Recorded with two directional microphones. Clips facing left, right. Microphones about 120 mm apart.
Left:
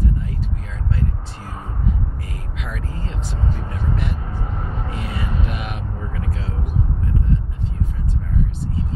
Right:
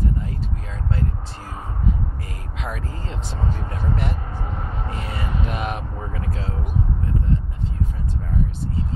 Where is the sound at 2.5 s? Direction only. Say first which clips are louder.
Right 2 dB; 35° right (ahead or behind).